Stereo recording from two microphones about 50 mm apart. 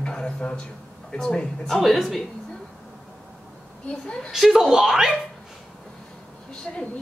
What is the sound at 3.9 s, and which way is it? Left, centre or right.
Speech, left.